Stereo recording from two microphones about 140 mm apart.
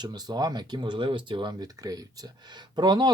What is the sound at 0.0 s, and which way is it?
Speech, 30° right (ahead or behind).